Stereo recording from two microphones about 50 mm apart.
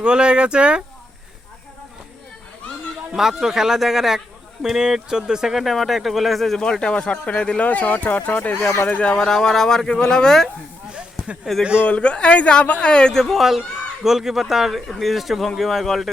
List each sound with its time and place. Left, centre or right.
0.0 s speech: centre
3.2 s speech: centre
6.6 s speech: centre; by 8.4 s left
8.9 s speech: left
9.2 s speech: centre
11.6 s speech: right
11.9 s speech: left
13.4 s speech: centre